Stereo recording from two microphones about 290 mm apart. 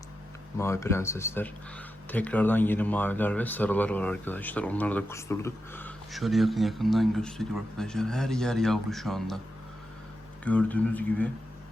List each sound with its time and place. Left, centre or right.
0.6 s speech: centre
10.4 s speech: centre